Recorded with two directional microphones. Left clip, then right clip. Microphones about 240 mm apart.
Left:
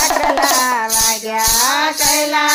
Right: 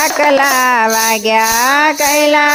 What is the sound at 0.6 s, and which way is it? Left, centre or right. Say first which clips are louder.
Child singing: right 5 dB; right.